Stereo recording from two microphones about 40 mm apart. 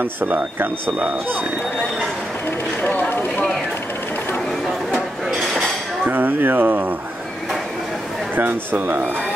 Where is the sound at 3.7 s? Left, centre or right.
Left.